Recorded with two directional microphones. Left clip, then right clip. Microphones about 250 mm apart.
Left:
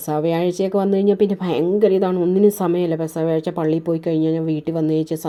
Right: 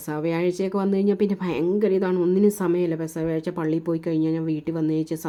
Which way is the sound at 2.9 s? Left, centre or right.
Right.